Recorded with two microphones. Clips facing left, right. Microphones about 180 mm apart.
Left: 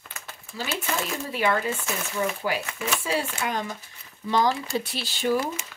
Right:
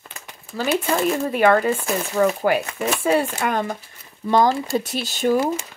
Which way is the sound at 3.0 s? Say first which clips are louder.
Right 10 dB; 55° right (ahead or behind).